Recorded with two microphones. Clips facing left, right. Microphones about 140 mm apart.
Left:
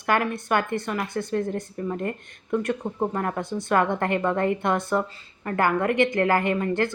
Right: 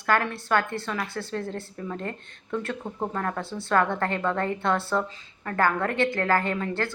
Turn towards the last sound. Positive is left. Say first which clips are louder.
# left 4 dB
turn(degrees=20)  # may be behind; listen again after turning